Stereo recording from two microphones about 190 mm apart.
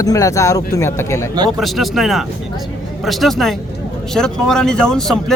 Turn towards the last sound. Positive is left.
turn(degrees=0)  # may be behind; listen again after turning